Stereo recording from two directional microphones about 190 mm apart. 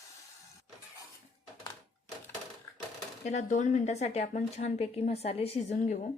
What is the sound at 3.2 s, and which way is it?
A woman's voice, 40° left (ahead or behind).